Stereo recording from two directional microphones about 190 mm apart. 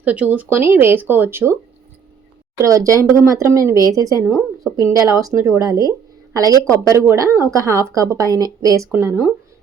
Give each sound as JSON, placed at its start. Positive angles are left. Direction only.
{"t": 0.0, "sound": "a woman's voice", "side_deg": -5}
{"t": 2.6, "sound": "a woman's voice", "side_deg": -15}
{"t": 4.2, "sound": "speech", "side_deg": 0}
{"t": 4.6, "sound": "a woman's voice", "side_deg": -15}